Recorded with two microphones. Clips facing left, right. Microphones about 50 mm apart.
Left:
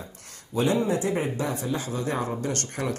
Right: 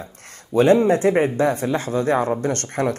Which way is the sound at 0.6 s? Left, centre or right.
Right.